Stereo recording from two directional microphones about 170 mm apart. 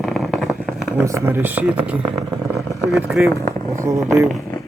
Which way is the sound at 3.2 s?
10° right (ahead or behind).